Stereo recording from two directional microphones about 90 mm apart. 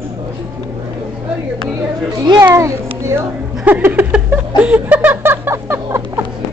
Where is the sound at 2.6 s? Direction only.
30° right (ahead or behind).